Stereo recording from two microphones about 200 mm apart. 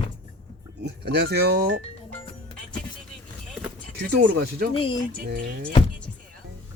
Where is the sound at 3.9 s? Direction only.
55° right (ahead or behind).